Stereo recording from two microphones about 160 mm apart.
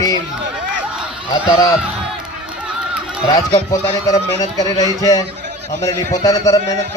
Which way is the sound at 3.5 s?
25° left (ahead or behind).